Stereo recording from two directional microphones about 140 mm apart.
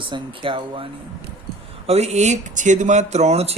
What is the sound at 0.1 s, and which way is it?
Speech, 35° right (ahead or behind).